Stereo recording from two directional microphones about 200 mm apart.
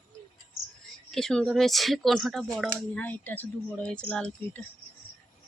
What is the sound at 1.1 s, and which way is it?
Speech, 5° left (ahead or behind).